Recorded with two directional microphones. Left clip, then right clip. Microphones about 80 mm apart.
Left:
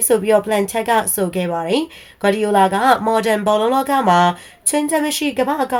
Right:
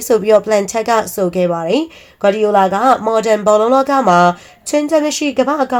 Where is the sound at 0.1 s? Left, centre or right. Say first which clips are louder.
Right 4 dB; right.